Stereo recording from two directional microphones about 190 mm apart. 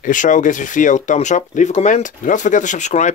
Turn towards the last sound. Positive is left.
turn(degrees=40)  # may be behind; listen again after turning